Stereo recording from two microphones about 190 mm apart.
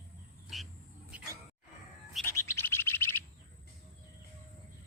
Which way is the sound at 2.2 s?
15° left (ahead or behind).